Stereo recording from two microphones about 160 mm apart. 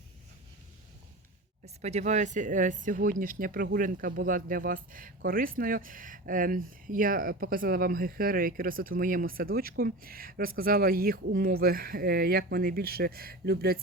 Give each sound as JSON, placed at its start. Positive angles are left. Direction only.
{"t": 1.6, "sound": "speech", "side_deg": -45}